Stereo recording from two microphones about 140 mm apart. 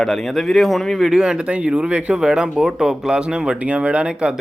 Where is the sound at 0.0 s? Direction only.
5° left (ahead or behind).